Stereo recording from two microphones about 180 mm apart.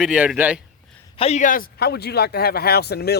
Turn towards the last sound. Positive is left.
turn(degrees=65)  # may be behind; listen again after turning